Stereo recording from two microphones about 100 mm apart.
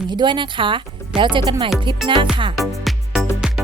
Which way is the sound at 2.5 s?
Centre (ahead or behind).